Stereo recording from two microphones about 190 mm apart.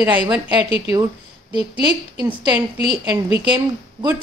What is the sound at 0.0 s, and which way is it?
Speech, 5° right (ahead or behind).